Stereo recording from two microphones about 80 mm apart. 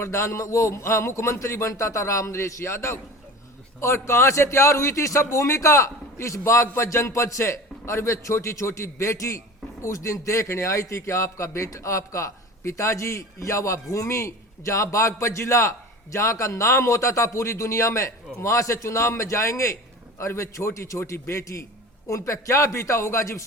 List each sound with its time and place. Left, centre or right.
0.0 s a man's voice: left